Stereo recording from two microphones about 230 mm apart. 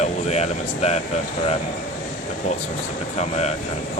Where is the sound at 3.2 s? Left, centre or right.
Left.